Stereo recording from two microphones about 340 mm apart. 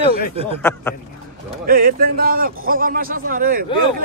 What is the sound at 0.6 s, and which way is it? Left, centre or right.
Speech, centre.